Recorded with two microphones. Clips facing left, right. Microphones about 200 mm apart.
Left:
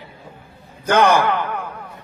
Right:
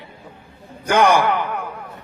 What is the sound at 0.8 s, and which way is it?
Speech, 10° right (ahead or behind).